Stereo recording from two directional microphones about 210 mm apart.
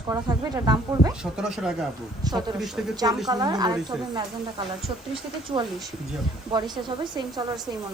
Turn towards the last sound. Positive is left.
turn(degrees=-20)  # may be behind; listen again after turning